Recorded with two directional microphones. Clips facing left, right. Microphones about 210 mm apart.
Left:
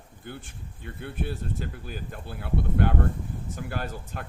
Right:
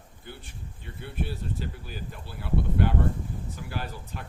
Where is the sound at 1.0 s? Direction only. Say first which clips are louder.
Left 1 dB; 50° left (ahead or behind).